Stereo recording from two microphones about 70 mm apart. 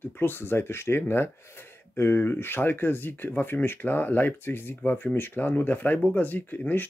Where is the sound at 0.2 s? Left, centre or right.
Left.